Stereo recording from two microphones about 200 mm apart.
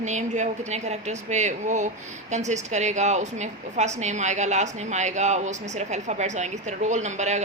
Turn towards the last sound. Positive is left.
turn(degrees=-35)  # may be behind; listen again after turning